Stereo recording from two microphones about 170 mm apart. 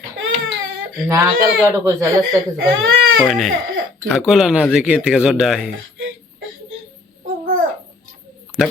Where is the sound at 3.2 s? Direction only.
Centre (ahead or behind).